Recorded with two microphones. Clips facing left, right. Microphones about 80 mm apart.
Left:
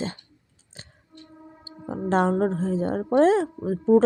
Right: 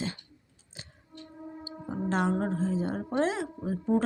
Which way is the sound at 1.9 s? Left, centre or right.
Left.